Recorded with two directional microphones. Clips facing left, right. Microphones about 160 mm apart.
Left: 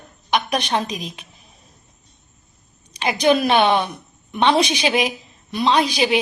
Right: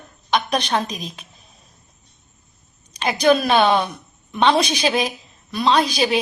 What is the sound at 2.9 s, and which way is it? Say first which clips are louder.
A woman's voice: right 1 dB; 15° left (ahead or behind).